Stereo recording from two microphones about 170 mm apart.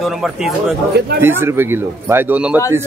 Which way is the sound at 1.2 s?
15° right (ahead or behind).